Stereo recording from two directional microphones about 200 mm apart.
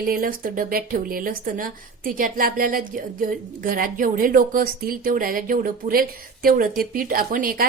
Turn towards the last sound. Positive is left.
turn(degrees=-45)  # may be behind; listen again after turning